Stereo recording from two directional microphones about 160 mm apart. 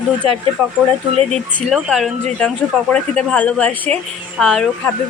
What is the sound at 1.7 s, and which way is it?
Speech, centre (ahead or behind).